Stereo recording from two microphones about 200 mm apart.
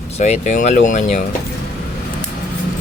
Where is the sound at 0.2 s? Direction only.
35° left (ahead or behind).